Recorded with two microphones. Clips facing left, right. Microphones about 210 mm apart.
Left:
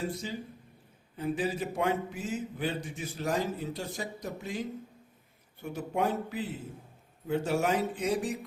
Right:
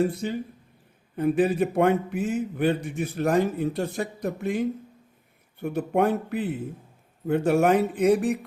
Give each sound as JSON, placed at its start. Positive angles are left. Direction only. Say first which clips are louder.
{"t": 0.0, "sound": "a man's voice", "louder": "right 10 dB", "side_deg": -60}